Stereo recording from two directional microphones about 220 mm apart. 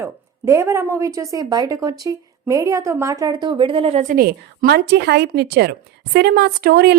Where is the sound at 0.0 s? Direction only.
10° right (ahead or behind).